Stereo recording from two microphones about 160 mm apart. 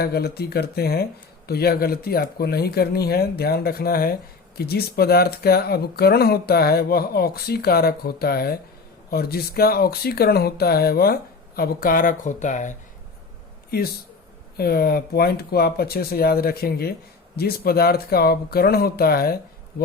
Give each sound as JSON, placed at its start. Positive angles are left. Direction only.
{"t": 0.0, "sound": "speech", "side_deg": 75}
{"t": 13.7, "sound": "speech", "side_deg": 75}